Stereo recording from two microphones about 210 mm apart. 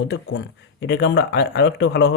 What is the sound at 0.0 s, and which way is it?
Speech, 55° left (ahead or behind).